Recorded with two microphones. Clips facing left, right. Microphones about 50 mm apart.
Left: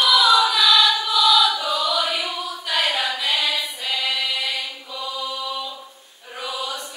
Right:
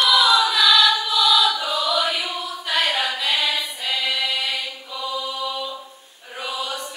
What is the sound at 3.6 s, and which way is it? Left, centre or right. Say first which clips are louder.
Mantra: right 1 dB; centre.